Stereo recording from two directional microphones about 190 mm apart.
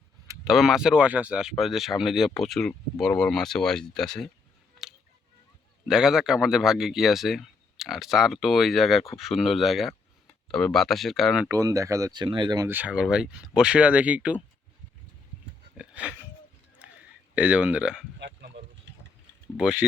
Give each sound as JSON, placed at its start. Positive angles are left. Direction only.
{"t": 0.4, "sound": "speech", "side_deg": 0}
{"t": 5.9, "sound": "speech", "side_deg": -5}
{"t": 11.5, "sound": "speech", "side_deg": -15}
{"t": 15.8, "sound": "a sound", "side_deg": -5}
{"t": 17.3, "sound": "speech", "side_deg": -5}
{"t": 18.2, "sound": "chop", "side_deg": -60}
{"t": 19.5, "sound": "speech", "side_deg": -5}